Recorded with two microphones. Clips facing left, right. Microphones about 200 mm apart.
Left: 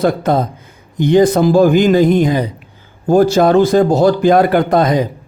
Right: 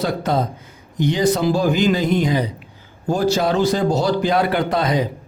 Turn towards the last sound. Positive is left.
turn(degrees=50)  # may be behind; listen again after turning